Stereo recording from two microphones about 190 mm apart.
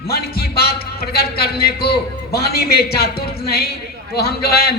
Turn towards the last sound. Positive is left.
turn(degrees=55)  # may be behind; listen again after turning